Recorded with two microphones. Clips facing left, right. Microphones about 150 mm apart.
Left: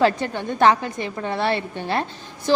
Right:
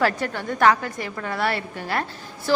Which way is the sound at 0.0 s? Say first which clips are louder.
Left 3 dB; 20° left (ahead or behind).